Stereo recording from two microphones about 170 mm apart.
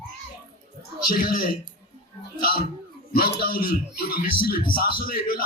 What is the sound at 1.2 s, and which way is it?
Speech, 55° left (ahead or behind).